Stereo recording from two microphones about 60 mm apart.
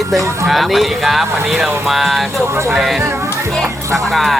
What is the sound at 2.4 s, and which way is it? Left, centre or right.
Speech, right.